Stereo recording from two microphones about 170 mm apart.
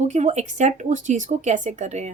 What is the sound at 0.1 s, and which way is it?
Speech, 45° right (ahead or behind).